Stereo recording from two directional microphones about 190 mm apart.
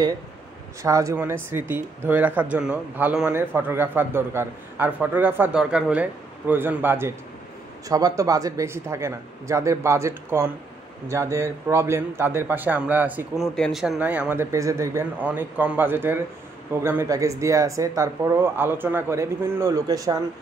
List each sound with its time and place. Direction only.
0.8 s speech: 15° right (ahead or behind)